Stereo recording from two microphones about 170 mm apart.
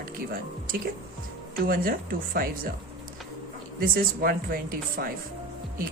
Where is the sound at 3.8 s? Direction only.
60° right (ahead or behind).